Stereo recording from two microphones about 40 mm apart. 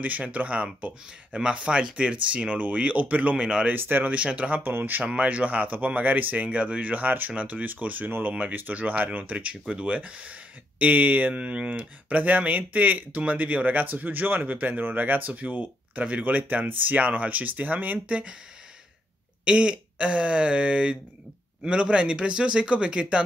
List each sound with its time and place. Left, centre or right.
0.0 s speech: right
1.3 s speech: right
3.7 s speech: right
4.1 s speech: right
4.6 s speech: right
5.0 s speech: right
8.3 s speech: right
8.5 s speech: right
10.8 s speech: right
11.3 s speech: right
13.1 s speech: right
18.0 s speech: right
19.4 s speech: right